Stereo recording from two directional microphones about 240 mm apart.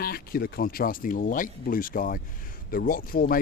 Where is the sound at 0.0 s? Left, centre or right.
Left.